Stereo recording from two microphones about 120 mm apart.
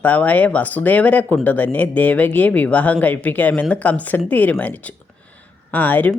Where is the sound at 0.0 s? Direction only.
15° left (ahead or behind).